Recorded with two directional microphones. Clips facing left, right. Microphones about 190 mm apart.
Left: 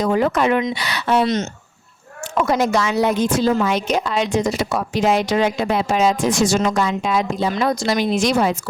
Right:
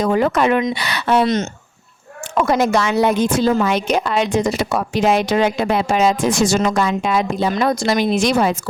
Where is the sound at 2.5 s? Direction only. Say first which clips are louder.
Right 2 dB; 60° right (ahead or behind).